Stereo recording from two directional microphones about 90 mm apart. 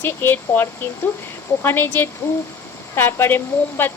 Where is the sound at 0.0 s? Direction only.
25° left (ahead or behind).